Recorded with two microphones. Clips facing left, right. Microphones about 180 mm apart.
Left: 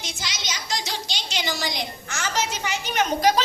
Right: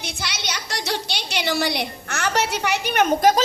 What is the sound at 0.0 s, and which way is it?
A woman's voice, 60° right (ahead or behind).